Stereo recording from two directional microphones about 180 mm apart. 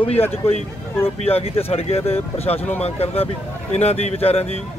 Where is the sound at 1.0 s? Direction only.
35° left (ahead or behind).